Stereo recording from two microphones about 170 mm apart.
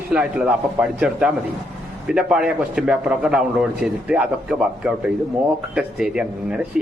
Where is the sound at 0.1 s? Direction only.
5° right (ahead or behind).